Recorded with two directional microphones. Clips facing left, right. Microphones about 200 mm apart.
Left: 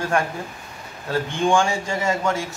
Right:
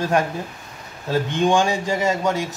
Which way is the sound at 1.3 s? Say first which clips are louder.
Right 1 dB; 20° right (ahead or behind).